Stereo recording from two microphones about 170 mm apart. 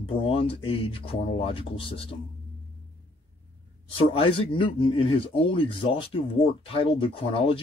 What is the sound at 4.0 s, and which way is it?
Speech, 35° left (ahead or behind).